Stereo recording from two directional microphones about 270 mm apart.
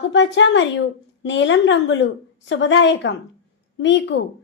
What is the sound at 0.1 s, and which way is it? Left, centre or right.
A woman's voice, left.